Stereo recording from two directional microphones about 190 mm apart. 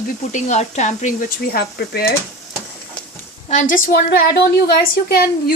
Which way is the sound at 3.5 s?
40° left (ahead or behind).